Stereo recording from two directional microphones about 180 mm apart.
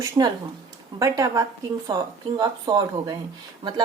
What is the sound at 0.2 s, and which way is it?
A woman's voice, 25° right (ahead or behind).